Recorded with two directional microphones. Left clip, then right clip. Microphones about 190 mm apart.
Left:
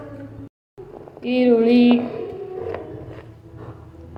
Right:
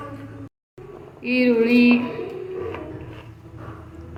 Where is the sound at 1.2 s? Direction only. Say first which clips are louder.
Left 2 dB; 50° left (ahead or behind).